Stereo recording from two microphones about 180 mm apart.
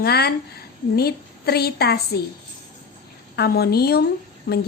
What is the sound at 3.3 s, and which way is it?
Speech, 60° left (ahead or behind).